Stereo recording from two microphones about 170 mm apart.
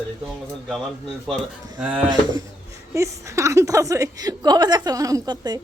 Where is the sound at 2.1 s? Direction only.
25° right (ahead or behind).